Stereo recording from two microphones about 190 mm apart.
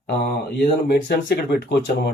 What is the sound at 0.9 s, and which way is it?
Speech, 60° left (ahead or behind).